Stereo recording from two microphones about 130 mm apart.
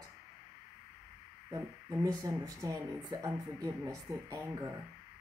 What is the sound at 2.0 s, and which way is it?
Speech, 25° right (ahead or behind).